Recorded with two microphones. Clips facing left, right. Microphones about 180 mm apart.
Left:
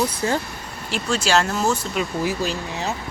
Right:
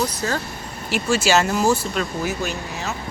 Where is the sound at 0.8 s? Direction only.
5° right (ahead or behind).